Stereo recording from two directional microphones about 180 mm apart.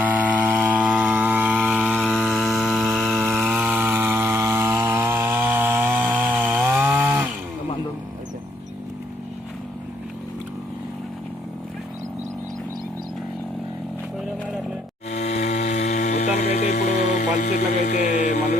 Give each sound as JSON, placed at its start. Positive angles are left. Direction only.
{"t": 0.0, "sound": "chainsaw", "side_deg": -10}
{"t": 2.0, "sound": "chainsaw", "side_deg": 5}
{"t": 15.1, "sound": "a sound", "side_deg": 40}
{"t": 18.0, "sound": "mantra", "side_deg": 45}